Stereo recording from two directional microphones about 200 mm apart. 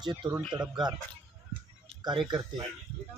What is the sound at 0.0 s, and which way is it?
Speech, 20° right (ahead or behind).